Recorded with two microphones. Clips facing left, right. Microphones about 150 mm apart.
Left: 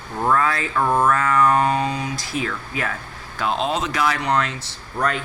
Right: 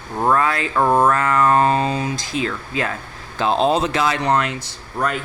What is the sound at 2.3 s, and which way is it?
Speech, 90° right.